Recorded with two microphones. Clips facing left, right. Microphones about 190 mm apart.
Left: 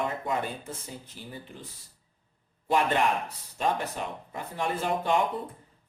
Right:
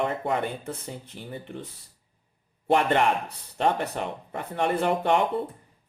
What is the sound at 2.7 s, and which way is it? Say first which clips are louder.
Speech: right 3 dB; 60° right (ahead or behind).